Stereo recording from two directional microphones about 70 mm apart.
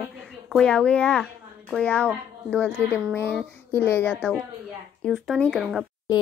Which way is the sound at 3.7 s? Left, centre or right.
Left.